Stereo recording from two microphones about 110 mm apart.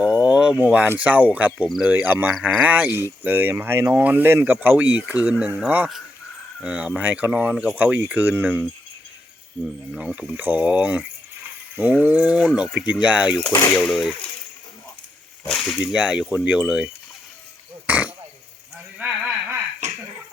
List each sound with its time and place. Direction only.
0.0 s speech: 10° right (ahead or behind)
1.6 s speech: centre (ahead or behind)
1.9 s speech: 15° right (ahead or behind)
9.9 s speech: 5° right (ahead or behind)
12.0 s speech: 10° right (ahead or behind)
15.4 s speech: 5° left (ahead or behind)
15.8 s speech: 10° right (ahead or behind)
17.8 s a sound: 10° right (ahead or behind)
19.8 s a sound: 90° right